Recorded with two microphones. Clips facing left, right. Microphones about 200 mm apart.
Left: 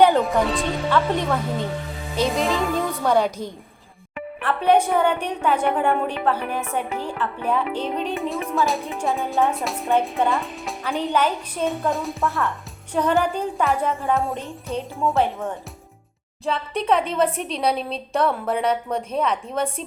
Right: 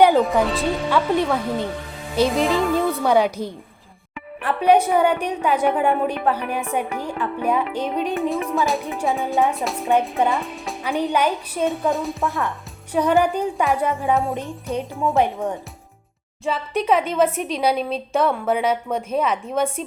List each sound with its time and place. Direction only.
0.1 s a woman's voice: centre (ahead or behind)
8.3 s speech: centre (ahead or behind)
10.2 s a woman's voice: 15° right (ahead or behind)
11.6 s speech: centre (ahead or behind)
12.3 s a woman's voice: 15° right (ahead or behind)
14.1 s speech: centre (ahead or behind)
14.3 s a woman's voice: 15° right (ahead or behind)
16.5 s speech: 5° right (ahead or behind)